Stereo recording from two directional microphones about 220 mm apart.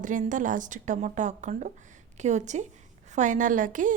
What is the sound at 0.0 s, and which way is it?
A woman's voice, 35° right (ahead or behind).